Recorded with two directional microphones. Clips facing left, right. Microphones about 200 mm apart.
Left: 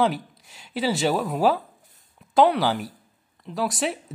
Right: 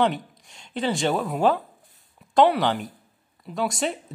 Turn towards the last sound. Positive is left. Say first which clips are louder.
# even
turn(degrees=0)  # may be behind; listen again after turning